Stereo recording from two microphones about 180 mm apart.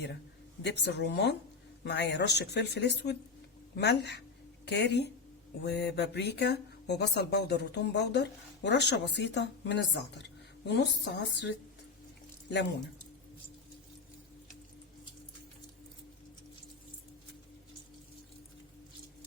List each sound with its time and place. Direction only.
0.6 s speech: 70° left (ahead or behind)